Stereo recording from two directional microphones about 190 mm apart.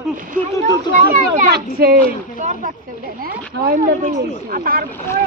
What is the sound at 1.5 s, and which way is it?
Speech, 55° right (ahead or behind).